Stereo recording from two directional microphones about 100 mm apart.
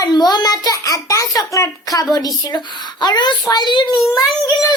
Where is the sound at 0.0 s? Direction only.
45° left (ahead or behind).